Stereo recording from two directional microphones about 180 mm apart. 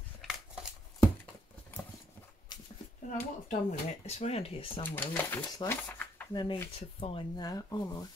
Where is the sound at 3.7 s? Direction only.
35° left (ahead or behind).